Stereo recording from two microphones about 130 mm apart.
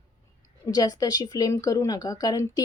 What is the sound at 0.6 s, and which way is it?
Speech, 30° left (ahead or behind).